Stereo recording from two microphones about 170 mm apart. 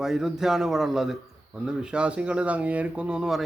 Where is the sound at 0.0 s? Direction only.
Centre (ahead or behind).